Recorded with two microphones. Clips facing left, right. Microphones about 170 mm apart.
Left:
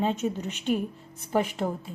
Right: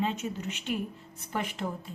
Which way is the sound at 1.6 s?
45° left (ahead or behind).